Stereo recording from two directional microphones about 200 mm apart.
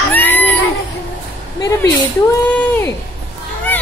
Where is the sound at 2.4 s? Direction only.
5° left (ahead or behind).